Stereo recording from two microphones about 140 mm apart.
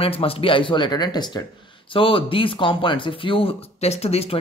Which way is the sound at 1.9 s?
40° left (ahead or behind).